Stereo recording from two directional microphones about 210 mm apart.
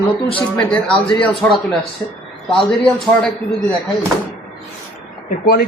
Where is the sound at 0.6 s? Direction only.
5° left (ahead or behind).